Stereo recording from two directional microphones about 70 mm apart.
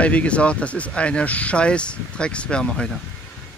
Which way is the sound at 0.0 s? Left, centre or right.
Centre.